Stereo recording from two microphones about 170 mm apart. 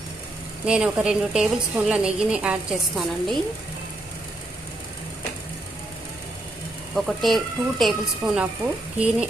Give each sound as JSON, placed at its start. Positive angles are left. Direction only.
{"t": 0.6, "sound": "a woman's voice", "side_deg": -5}
{"t": 6.9, "sound": "a woman's voice", "side_deg": 0}